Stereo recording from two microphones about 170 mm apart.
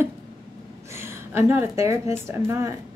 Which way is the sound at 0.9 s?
15° right (ahead or behind).